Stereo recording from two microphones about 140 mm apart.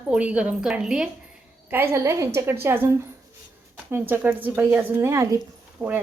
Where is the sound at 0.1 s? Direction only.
10° right (ahead or behind).